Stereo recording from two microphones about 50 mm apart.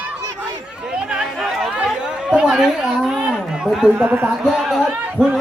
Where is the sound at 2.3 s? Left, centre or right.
Centre.